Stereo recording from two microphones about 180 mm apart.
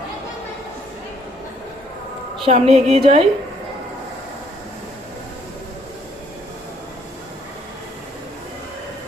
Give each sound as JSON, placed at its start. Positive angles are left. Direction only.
{"t": 2.4, "sound": "a woman's voice", "side_deg": -30}